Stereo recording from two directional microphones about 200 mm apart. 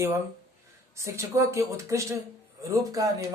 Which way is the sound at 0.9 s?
15° right (ahead or behind).